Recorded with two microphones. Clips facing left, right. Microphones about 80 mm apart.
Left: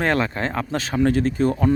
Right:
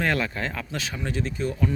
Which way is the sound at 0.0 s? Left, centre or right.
Left.